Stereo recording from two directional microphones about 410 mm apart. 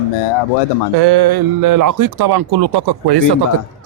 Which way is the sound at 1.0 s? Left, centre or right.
Right.